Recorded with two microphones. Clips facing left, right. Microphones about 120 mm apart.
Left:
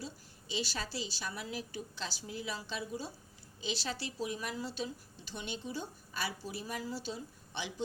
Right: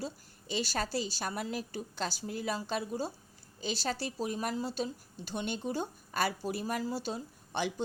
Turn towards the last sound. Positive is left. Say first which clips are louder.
# right 8 dB
turn(degrees=-50)  # may be behind; listen again after turning